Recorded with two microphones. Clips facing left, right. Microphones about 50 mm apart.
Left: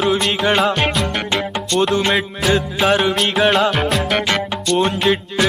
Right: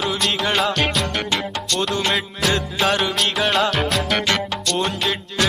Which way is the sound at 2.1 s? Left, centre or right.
Centre.